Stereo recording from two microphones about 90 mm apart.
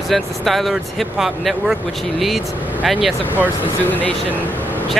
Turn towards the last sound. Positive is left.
turn(degrees=20)  # may be behind; listen again after turning